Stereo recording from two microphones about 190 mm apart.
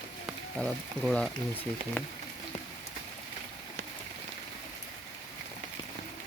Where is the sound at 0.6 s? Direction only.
5° left (ahead or behind).